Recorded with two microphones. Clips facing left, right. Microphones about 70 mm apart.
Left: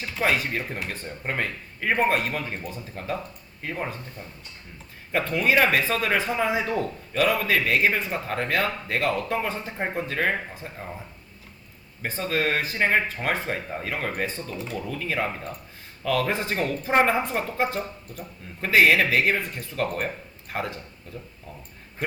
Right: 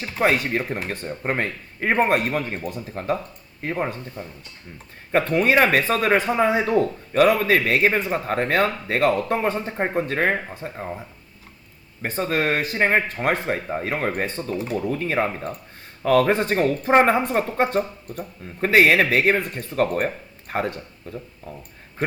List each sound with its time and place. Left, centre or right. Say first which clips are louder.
0.0 s a man's voice: right 4 dB; right
5.1 s a man's voice: right 4 dB; right
12.0 s a man's voice: right 3 dB; right